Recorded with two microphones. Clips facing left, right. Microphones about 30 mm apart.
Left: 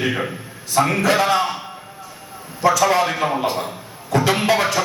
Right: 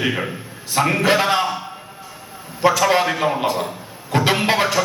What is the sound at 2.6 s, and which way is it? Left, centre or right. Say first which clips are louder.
A man's voice: even; right.